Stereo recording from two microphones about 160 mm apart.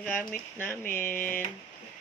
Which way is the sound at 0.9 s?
15° left (ahead or behind).